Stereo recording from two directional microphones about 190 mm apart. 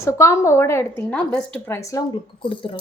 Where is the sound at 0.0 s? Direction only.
15° left (ahead or behind).